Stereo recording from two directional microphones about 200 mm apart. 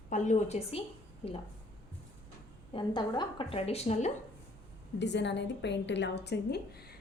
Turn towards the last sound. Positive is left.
turn(degrees=50)  # may be behind; listen again after turning